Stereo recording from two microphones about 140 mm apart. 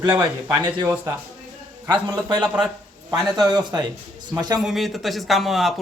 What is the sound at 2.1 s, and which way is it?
Speech, 30° right (ahead or behind).